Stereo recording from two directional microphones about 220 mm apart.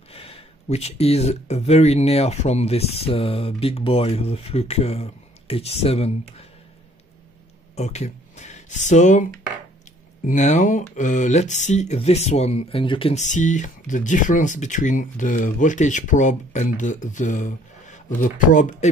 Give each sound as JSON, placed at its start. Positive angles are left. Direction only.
{"t": 0.1, "sound": "speech", "side_deg": 25}
{"t": 7.7, "sound": "speech", "side_deg": 30}